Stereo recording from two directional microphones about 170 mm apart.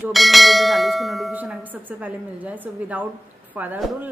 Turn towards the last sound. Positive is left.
turn(degrees=-5)  # may be behind; listen again after turning